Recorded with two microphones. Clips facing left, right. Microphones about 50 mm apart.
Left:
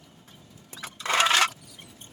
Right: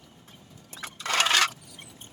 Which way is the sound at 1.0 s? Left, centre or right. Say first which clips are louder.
Left 2 dB; left.